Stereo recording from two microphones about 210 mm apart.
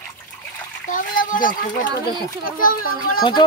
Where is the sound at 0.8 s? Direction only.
40° left (ahead or behind).